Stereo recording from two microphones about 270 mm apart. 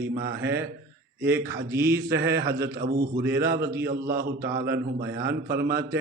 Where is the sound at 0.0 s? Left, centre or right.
Right.